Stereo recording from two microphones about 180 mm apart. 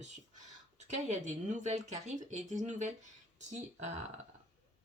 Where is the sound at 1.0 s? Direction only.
40° right (ahead or behind).